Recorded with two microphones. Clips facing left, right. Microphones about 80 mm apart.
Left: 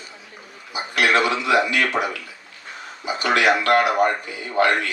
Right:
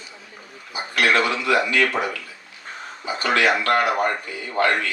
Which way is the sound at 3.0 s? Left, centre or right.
Centre.